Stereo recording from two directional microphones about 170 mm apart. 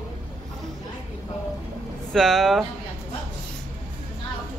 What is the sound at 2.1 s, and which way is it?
Speech, centre (ahead or behind).